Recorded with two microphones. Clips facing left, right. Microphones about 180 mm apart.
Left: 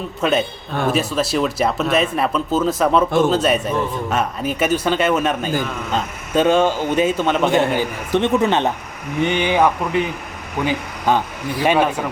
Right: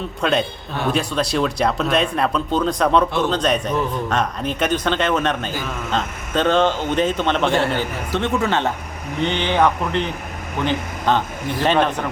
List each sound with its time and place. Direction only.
0.2 s a man's voice: 5° left (ahead or behind)